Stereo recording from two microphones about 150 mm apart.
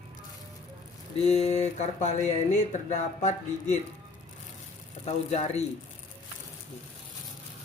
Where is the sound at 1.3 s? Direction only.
45° left (ahead or behind).